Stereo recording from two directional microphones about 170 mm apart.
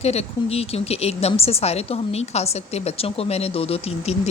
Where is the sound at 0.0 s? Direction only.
40° left (ahead or behind).